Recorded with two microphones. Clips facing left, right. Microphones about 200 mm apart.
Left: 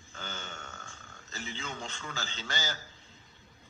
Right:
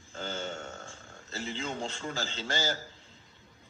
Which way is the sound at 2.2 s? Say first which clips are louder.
Right 5 dB; 30° right (ahead or behind).